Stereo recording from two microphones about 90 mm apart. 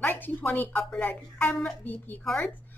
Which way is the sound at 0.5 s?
20° left (ahead or behind).